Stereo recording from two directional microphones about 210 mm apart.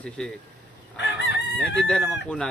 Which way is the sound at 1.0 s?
55° left (ahead or behind).